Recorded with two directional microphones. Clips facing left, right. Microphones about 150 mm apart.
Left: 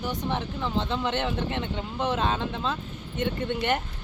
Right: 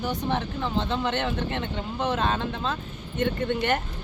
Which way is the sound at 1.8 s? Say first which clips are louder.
Right 1 dB; 20° left (ahead or behind).